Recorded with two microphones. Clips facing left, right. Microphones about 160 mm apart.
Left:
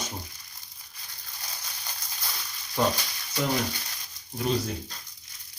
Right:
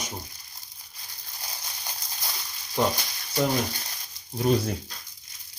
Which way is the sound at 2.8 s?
20° right (ahead or behind).